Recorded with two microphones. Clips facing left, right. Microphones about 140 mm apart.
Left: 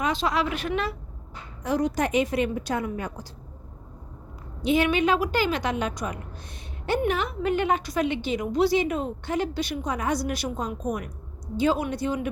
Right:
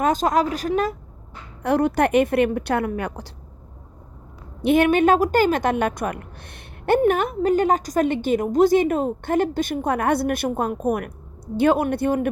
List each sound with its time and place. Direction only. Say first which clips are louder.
0.0 s a woman's voice: right 6 dB; 45° right (ahead or behind)
1.6 s a woman's voice: right 6 dB; 60° right (ahead or behind)
4.6 s a woman's voice: right 6 dB; 55° right (ahead or behind)